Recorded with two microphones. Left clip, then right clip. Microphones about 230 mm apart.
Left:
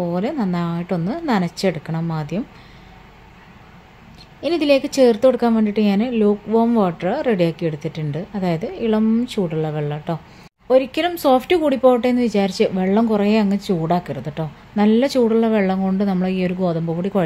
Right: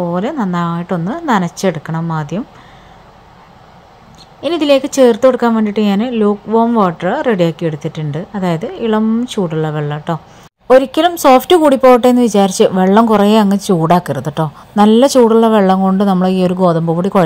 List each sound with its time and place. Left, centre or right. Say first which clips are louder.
0.0 s a woman's voice: right 5 dB; centre
4.4 s a woman's voice: right 5 dB; centre